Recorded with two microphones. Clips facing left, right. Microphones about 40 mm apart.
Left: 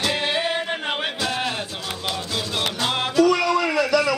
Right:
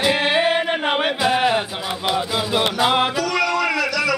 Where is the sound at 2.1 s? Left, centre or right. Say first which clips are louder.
Right 7 dB; centre.